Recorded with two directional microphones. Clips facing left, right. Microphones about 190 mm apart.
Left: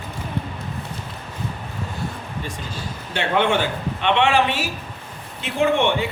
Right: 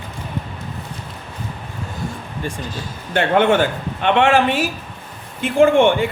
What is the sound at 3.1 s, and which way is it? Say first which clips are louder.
A man's voice: right 5 dB; 50° right (ahead or behind).